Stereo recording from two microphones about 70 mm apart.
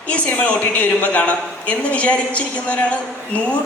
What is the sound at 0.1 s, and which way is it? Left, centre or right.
A woman's voice, centre.